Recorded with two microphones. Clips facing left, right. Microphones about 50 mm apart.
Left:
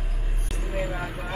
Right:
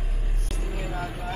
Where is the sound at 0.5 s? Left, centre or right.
Centre.